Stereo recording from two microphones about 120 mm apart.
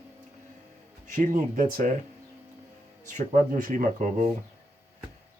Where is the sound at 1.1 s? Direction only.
90° right.